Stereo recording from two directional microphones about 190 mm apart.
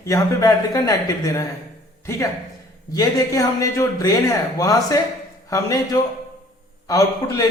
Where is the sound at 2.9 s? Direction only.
20° left (ahead or behind).